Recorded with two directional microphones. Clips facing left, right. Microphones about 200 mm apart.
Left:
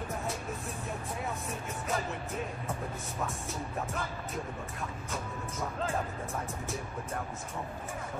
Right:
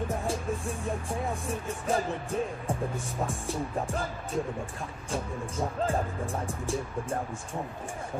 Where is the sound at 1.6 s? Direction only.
30° right (ahead or behind).